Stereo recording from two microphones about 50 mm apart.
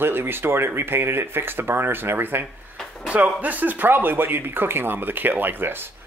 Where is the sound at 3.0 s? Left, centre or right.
Right.